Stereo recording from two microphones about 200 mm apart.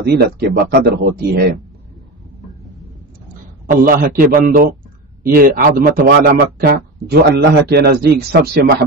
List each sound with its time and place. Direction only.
0.0 s speech: 55° right (ahead or behind)
3.7 s speech: 45° right (ahead or behind)